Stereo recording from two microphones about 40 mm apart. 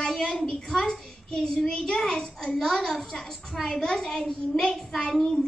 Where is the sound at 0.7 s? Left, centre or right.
Centre.